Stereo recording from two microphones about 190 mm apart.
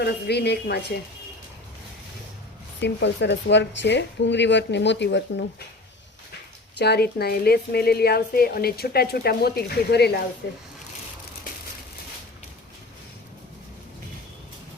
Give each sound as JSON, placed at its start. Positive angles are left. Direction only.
{"t": 0.0, "sound": "speech", "side_deg": 60}
{"t": 2.8, "sound": "speech", "side_deg": 65}
{"t": 6.7, "sound": "speech", "side_deg": 60}